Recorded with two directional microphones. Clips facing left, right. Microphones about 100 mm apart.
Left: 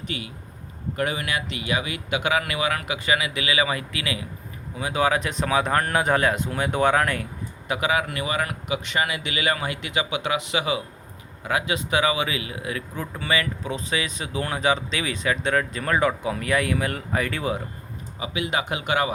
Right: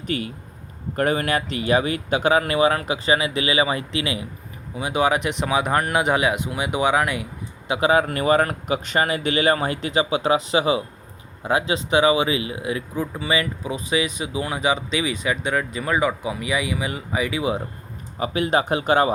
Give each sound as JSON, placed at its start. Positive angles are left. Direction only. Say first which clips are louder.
{"t": 0.1, "sound": "speech", "louder": "right 7 dB", "side_deg": -45}
{"t": 7.7, "sound": "speech", "louder": "right 5 dB", "side_deg": -35}
{"t": 18.2, "sound": "speech", "louder": "right 6 dB", "side_deg": -40}